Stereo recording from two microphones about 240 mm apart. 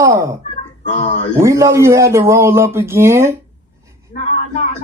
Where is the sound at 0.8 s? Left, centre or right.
Left.